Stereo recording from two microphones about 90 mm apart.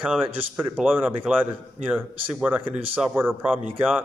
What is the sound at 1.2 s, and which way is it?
A man's voice, 20° right (ahead or behind).